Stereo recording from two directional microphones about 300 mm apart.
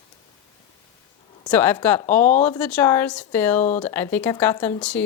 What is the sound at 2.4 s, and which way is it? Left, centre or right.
Speech, centre.